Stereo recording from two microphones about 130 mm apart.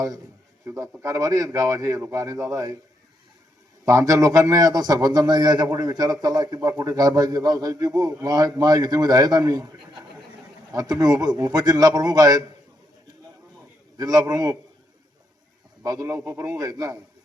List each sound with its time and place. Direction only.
0.6 s a man's voice: 25° right (ahead or behind)
3.8 s a man's voice: 25° right (ahead or behind)
13.9 s a man's voice: 30° right (ahead or behind)
15.8 s a man's voice: 25° right (ahead or behind)